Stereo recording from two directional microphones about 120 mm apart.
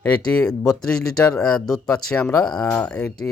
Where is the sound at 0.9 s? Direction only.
5° left (ahead or behind).